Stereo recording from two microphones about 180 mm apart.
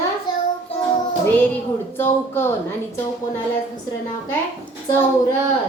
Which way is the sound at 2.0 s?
10° left (ahead or behind).